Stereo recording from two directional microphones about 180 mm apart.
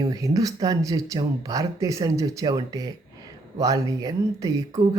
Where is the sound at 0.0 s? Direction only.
20° right (ahead or behind).